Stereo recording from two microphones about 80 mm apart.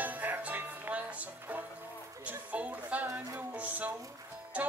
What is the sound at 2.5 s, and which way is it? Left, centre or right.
Music, centre.